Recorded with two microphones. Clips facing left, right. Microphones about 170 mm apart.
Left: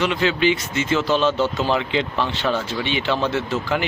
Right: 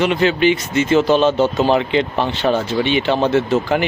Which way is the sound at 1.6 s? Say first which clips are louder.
Right 6 dB; 55° right (ahead or behind).